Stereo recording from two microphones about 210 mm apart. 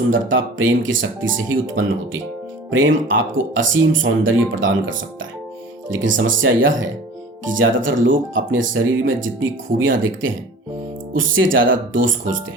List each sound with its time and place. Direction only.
0.1 s speech: 65° right (ahead or behind)